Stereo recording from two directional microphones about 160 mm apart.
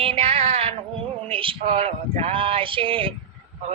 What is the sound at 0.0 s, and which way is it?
Music, 35° right (ahead or behind).